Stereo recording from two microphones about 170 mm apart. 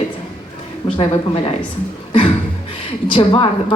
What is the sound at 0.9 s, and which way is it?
Speech, 35° left (ahead or behind).